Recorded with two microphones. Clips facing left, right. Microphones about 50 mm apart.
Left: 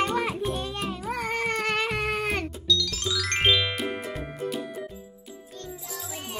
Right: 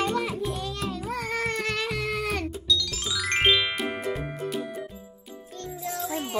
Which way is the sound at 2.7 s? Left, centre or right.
Centre.